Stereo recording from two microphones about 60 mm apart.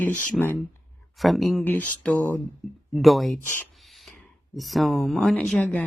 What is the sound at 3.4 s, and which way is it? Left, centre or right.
Speech, left.